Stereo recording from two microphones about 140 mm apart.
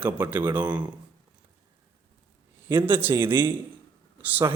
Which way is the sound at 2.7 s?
15° right (ahead or behind).